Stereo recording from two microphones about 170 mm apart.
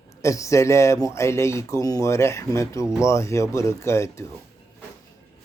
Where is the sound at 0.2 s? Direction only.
20° left (ahead or behind).